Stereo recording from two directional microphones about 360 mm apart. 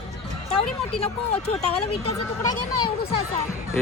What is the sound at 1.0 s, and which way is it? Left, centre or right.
Speech, centre.